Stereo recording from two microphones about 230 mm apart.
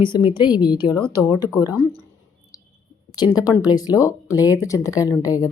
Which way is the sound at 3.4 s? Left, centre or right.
Centre.